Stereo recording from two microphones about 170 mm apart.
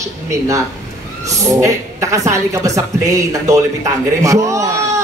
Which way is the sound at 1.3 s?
20° right (ahead or behind).